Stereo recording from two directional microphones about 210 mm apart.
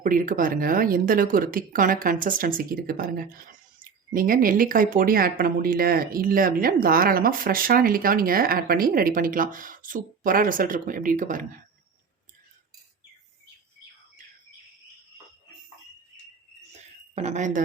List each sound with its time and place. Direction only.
0.0 s speech: 40° right (ahead or behind)
17.2 s speech: 35° right (ahead or behind)